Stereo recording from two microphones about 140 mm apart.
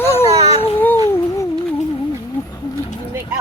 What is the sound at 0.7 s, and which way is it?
Cat, 15° left (ahead or behind).